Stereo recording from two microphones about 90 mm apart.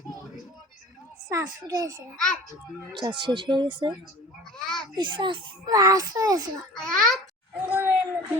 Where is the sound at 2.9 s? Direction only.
60° right (ahead or behind).